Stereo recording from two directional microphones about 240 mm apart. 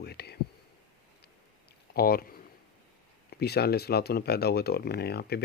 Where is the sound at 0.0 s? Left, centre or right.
Left.